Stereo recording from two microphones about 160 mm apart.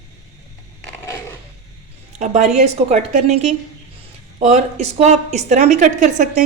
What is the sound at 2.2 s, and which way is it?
A woman's voice, 45° right (ahead or behind).